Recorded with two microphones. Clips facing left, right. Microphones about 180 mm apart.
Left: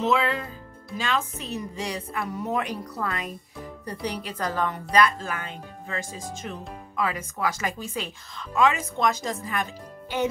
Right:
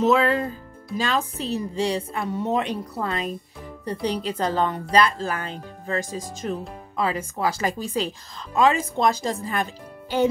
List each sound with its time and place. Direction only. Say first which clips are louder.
0.0 s a woman's voice: right 5 dB; 40° right (ahead or behind)